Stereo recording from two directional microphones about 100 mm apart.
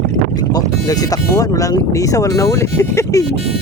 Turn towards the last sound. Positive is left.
turn(degrees=30)  # may be behind; listen again after turning